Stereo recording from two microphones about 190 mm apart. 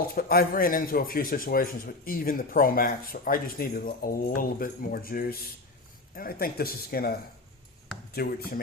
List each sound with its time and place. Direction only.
0.1 s speech: 55° left (ahead or behind)